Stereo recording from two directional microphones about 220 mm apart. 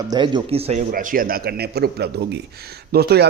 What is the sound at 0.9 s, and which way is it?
A man's voice, 40° right (ahead or behind).